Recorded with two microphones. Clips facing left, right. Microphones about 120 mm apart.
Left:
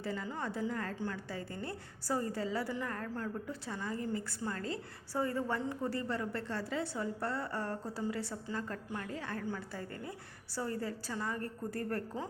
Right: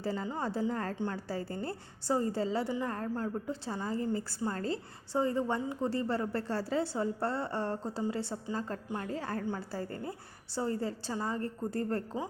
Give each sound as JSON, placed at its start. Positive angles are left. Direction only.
{"t": 0.0, "sound": "a woman's voice", "side_deg": -35}